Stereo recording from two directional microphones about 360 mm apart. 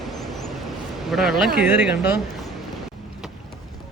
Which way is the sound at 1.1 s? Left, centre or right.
Centre.